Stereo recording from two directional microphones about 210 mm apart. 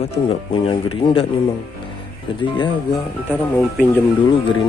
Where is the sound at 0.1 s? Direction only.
25° left (ahead or behind).